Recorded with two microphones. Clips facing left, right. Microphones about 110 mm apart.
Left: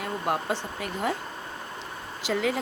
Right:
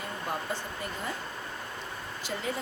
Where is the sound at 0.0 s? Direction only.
75° left (ahead or behind).